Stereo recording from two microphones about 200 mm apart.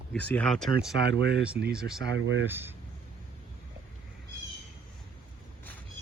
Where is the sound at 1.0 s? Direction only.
55° right (ahead or behind).